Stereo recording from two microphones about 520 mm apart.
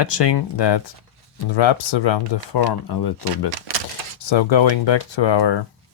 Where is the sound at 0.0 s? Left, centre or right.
Left.